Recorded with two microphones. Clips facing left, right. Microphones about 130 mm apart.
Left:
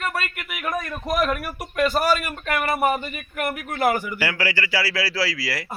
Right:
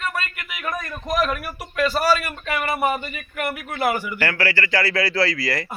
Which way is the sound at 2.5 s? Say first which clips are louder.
Left 1 dB; 45° left (ahead or behind).